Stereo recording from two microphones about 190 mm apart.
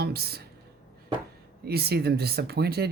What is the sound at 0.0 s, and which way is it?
Speech, 55° right (ahead or behind).